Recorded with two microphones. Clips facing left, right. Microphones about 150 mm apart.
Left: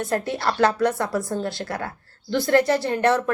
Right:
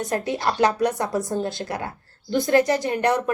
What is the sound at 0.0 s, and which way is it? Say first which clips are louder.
A woman's voice: even; 20° right (ahead or behind).